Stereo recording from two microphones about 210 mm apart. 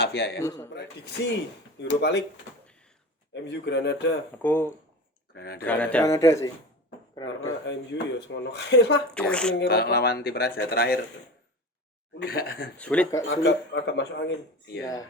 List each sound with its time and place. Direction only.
0.0 s speech: 50° left (ahead or behind)
0.3 s a man's voice: 15° left (ahead or behind)
0.7 s speech: 55° left (ahead or behind)
3.3 s speech: 55° left (ahead or behind)
4.4 s a man's voice: 10° left (ahead or behind)
5.3 s speech: 50° left (ahead or behind)
5.6 s a man's voice: 5° left (ahead or behind)
7.6 s speech: 55° left (ahead or behind)
9.3 s speech: 5° left (ahead or behind)
9.6 s speech: 50° left (ahead or behind)
12.2 s speech: 45° left (ahead or behind)
12.7 s a man's voice: 5° left (ahead or behind)
13.2 s speech: 60° left (ahead or behind)